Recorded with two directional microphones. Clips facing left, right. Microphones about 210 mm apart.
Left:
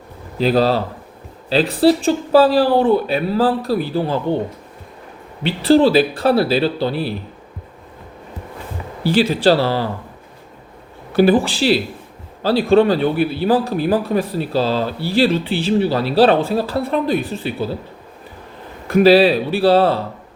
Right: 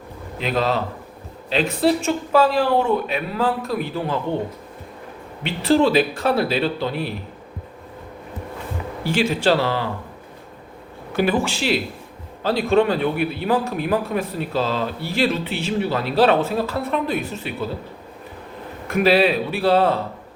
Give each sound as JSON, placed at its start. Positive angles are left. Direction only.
{"t": 0.3, "sound": "a man's voice", "side_deg": 35}
{"t": 5.4, "sound": "a man's voice", "side_deg": 35}
{"t": 9.0, "sound": "a man's voice", "side_deg": 35}
{"t": 11.1, "sound": "a man's voice", "side_deg": 35}
{"t": 18.9, "sound": "a man's voice", "side_deg": 35}